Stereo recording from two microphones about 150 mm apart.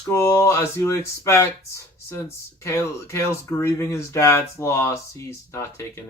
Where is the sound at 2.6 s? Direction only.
20° left (ahead or behind).